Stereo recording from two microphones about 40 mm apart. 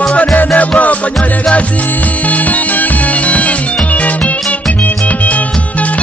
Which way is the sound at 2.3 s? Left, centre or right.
Left.